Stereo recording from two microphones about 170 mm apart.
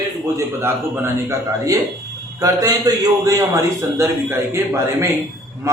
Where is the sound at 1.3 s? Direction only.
20° right (ahead or behind).